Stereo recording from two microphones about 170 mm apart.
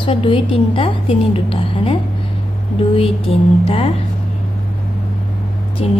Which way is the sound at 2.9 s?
35° left (ahead or behind).